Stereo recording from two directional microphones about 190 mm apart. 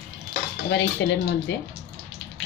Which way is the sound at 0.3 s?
75° left (ahead or behind).